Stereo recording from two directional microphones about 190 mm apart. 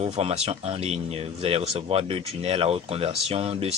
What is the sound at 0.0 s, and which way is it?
Speech, 35° right (ahead or behind).